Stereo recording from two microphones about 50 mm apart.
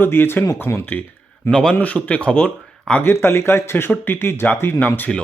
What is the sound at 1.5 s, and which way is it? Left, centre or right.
Speech, centre.